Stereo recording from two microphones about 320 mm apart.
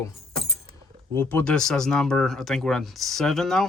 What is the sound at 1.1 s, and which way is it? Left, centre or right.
Speech, centre.